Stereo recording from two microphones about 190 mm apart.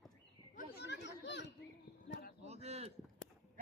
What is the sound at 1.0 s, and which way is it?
Speech, 65° left (ahead or behind).